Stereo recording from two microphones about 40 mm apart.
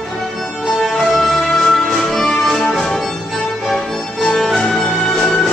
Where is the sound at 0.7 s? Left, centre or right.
Centre.